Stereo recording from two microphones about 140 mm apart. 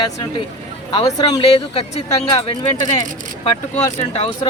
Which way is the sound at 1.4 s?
45° left (ahead or behind).